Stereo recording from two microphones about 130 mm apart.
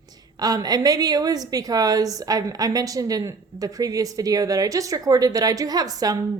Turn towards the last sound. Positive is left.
turn(degrees=-30)  # may be behind; listen again after turning